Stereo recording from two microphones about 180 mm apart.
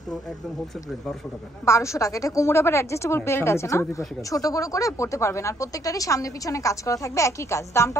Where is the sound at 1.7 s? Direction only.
15° left (ahead or behind).